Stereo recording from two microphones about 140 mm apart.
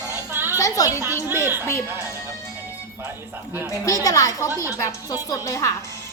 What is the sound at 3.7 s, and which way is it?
Speech, 25° left (ahead or behind).